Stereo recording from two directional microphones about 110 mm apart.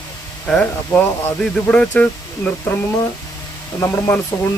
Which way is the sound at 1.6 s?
10° left (ahead or behind).